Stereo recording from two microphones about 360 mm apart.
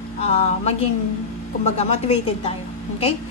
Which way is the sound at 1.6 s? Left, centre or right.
Centre.